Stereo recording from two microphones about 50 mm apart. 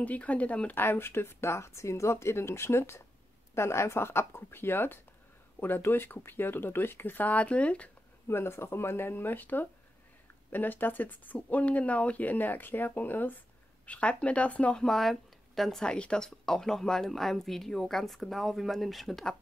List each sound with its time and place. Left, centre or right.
0.0 s speech: left
0.7 s speech: left
8.3 s speech: left
13.8 s speech: left
14.8 s speech: centre
15.8 s speech: centre